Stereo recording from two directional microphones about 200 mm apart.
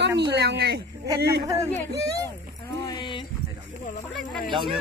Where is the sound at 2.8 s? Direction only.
20° left (ahead or behind).